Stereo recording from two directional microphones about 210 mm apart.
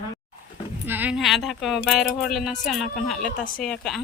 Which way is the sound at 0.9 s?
5° right (ahead or behind).